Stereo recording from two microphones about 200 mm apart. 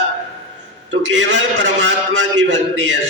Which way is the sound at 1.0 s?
65° right (ahead or behind).